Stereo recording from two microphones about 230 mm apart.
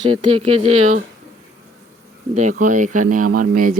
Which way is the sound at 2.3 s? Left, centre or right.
Right.